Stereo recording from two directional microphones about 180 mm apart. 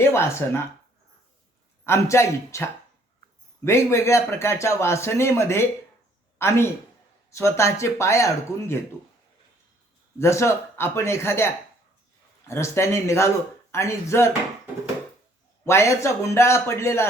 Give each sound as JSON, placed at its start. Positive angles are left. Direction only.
{"t": 0.0, "sound": "a man's voice", "side_deg": 15}
{"t": 1.8, "sound": "a man's voice", "side_deg": 15}
{"t": 10.2, "sound": "a man's voice", "side_deg": 15}
{"t": 15.6, "sound": "a man's voice", "side_deg": 15}